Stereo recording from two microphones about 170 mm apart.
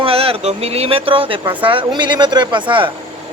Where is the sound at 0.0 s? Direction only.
35° right (ahead or behind).